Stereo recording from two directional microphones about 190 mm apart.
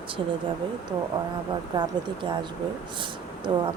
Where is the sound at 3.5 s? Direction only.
25° right (ahead or behind).